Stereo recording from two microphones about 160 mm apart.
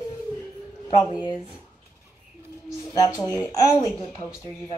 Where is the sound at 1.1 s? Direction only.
25° left (ahead or behind).